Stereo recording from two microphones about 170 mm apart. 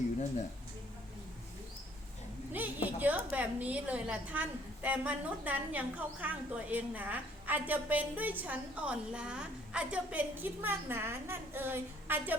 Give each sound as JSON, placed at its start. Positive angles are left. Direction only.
{"t": 2.5, "sound": "a woman's voice", "side_deg": -10}